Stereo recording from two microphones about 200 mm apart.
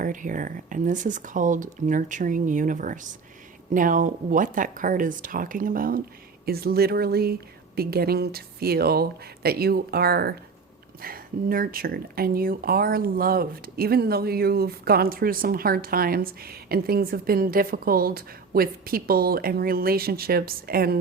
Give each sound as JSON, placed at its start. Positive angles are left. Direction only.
{"t": 0.0, "sound": "speech", "side_deg": -40}